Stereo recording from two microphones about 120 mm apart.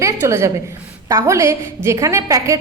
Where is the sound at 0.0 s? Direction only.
20° right (ahead or behind).